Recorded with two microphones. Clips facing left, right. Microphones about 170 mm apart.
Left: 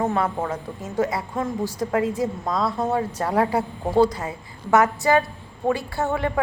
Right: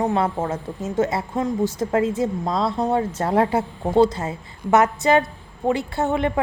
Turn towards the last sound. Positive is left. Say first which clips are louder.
# right 2 dB
turn(degrees=-20)  # may be behind; listen again after turning